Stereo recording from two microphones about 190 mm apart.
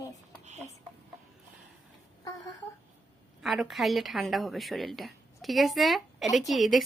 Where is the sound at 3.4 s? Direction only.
Centre (ahead or behind).